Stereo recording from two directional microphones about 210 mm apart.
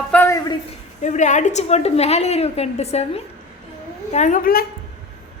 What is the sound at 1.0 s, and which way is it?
A woman's voice, 35° left (ahead or behind).